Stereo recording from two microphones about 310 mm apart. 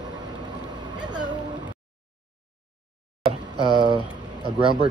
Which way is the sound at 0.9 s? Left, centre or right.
Centre.